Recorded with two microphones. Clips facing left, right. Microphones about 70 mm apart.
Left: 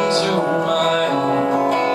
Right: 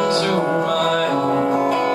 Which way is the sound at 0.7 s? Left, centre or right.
Left.